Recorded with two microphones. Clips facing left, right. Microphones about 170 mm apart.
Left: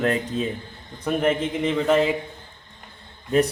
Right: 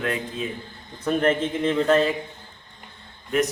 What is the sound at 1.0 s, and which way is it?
Speech, 10° left (ahead or behind).